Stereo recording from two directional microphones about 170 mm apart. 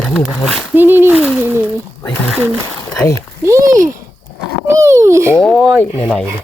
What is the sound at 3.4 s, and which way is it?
A child's voice, 20° right (ahead or behind).